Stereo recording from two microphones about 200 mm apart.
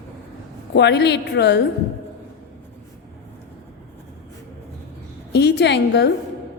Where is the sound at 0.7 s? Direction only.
60° left (ahead or behind).